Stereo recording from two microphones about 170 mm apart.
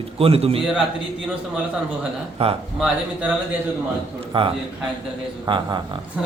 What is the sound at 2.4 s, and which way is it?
Speech, 35° right (ahead or behind).